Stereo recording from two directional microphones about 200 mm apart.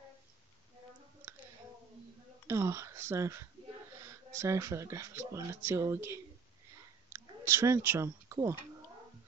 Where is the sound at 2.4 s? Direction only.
15° right (ahead or behind).